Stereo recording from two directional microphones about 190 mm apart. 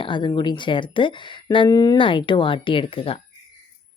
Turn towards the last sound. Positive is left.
turn(degrees=30)  # may be behind; listen again after turning